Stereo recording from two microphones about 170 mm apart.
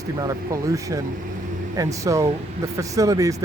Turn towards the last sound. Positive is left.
turn(degrees=-20)  # may be behind; listen again after turning